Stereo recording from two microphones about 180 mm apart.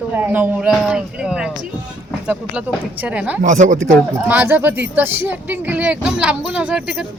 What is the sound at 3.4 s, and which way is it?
Speech, 45° right (ahead or behind).